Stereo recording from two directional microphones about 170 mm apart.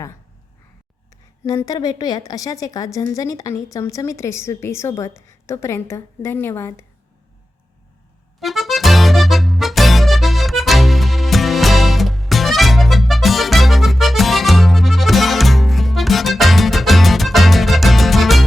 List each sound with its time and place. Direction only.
1.5 s a woman's voice: 20° left (ahead or behind)
8.4 s music: centre (ahead or behind)